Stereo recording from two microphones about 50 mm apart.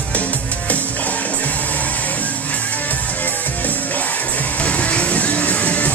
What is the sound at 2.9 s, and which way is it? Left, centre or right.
Music, left.